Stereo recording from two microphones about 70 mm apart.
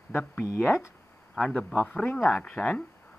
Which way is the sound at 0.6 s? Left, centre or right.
Left.